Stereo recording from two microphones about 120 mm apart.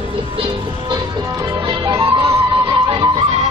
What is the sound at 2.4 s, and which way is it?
Music, 40° right (ahead or behind).